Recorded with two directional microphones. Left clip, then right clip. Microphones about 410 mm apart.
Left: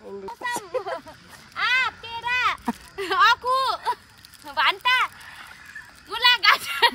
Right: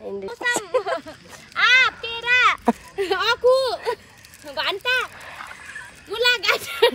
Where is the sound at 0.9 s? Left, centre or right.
Centre.